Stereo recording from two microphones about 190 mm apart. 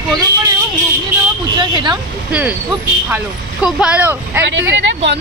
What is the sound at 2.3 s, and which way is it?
Speech, 5° right (ahead or behind).